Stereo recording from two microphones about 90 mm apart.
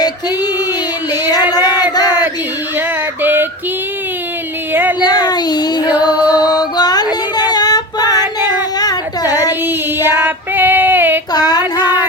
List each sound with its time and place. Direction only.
1.1 s music: 45° left (ahead or behind)
1.5 s a sound: 45° left (ahead or behind)
2.7 s child singing: 25° right (ahead or behind)
4.7 s a sound: 20° right (ahead or behind)
4.9 s child singing: 50° left (ahead or behind)
6.0 s female singing: 50° left (ahead or behind)
10.2 s female singing: 20° right (ahead or behind)
11.3 s child singing: 50° left (ahead or behind)